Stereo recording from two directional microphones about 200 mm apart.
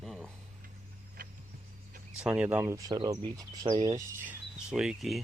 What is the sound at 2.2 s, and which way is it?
Speech, 5° right (ahead or behind).